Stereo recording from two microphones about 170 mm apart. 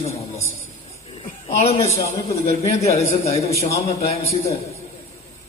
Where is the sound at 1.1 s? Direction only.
35° left (ahead or behind).